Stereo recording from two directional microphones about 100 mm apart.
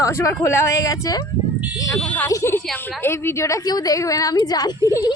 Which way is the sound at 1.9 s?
15° left (ahead or behind).